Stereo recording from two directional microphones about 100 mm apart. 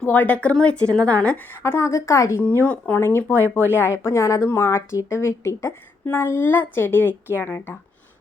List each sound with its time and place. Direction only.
0.0 s speech: 15° left (ahead or behind)
1.6 s a woman's voice: 30° left (ahead or behind)